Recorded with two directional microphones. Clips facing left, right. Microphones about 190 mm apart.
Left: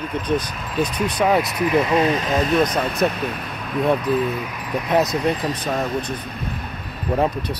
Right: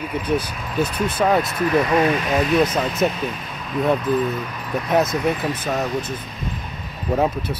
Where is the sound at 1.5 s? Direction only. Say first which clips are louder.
Even; 20° left (ahead or behind).